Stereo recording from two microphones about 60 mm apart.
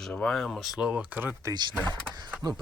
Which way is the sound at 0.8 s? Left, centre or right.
Centre.